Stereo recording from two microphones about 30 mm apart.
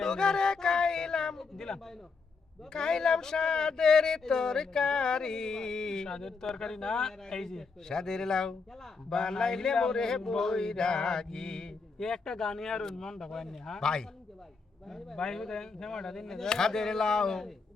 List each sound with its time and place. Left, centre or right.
0.0 s speech: left